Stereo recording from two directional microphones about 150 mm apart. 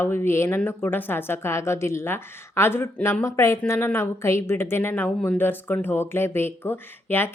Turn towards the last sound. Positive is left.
turn(degrees=15)  # may be behind; listen again after turning